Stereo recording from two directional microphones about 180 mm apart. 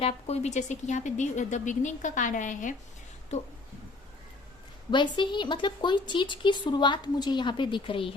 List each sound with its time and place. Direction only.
0.0 s speech: 35° left (ahead or behind)
4.9 s speech: 25° left (ahead or behind)